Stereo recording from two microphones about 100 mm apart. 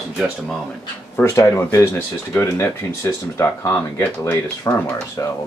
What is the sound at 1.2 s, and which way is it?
Speech, 30° left (ahead or behind).